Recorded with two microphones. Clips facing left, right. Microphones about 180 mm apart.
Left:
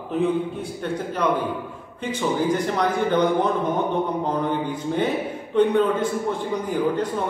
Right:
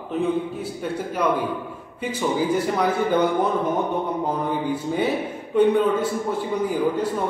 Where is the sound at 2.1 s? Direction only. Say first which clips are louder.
Even; 10° right (ahead or behind).